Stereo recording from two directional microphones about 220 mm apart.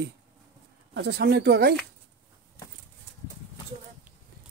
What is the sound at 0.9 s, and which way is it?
Speech, 50° right (ahead or behind).